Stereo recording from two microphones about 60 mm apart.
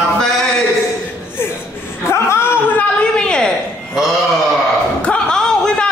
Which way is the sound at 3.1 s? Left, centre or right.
Centre.